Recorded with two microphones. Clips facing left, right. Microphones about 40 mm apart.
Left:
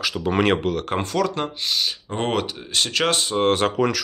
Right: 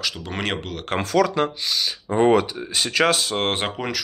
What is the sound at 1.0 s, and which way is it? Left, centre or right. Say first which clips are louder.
Speech: even; right.